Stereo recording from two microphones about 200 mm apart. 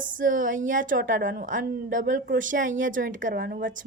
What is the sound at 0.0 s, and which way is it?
A woman's voice, 40° right (ahead or behind).